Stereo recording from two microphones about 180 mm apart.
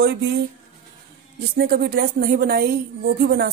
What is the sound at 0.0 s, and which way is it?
Speech, 65° right (ahead or behind).